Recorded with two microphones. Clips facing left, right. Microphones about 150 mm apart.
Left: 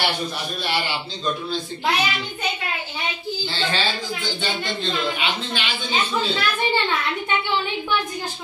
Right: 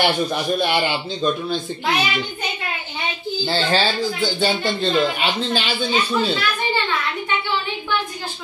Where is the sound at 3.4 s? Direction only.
35° right (ahead or behind).